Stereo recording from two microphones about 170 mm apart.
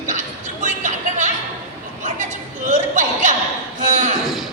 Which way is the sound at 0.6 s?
45° right (ahead or behind).